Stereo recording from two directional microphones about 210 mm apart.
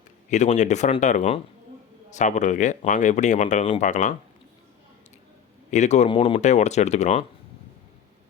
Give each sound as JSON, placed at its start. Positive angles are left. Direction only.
{"t": 0.3, "sound": "speech", "side_deg": 35}
{"t": 5.7, "sound": "speech", "side_deg": 35}